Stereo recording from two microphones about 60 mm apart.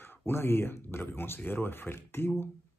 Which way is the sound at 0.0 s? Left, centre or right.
Left.